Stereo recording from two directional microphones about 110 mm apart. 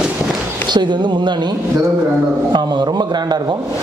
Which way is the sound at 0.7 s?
45° right (ahead or behind).